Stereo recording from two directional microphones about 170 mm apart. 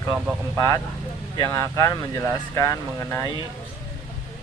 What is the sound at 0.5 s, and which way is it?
Speech, 20° left (ahead or behind).